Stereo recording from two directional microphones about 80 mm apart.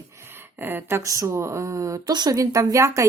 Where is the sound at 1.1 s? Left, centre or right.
Right.